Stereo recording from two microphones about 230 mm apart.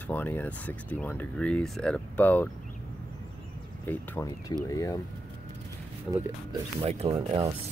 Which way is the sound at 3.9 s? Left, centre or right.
Centre.